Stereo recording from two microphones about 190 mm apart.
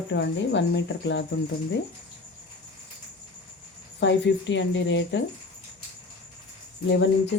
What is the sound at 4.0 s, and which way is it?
Speech, 70° left (ahead or behind).